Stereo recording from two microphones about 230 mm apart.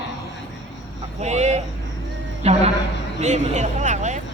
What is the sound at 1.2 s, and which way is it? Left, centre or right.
Speech, right.